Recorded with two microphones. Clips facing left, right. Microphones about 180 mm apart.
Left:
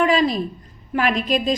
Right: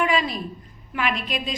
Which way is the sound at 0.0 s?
35° left (ahead or behind).